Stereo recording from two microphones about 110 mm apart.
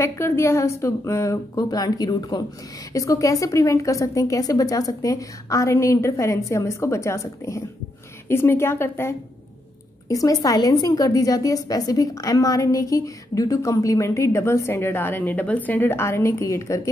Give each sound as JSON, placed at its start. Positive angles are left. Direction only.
{"t": 0.0, "sound": "a woman's voice", "side_deg": 25}
{"t": 10.0, "sound": "a woman's voice", "side_deg": 35}